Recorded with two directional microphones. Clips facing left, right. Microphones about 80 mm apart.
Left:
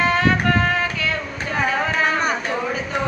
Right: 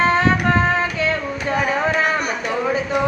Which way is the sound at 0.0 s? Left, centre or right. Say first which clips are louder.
Right 2 dB; right.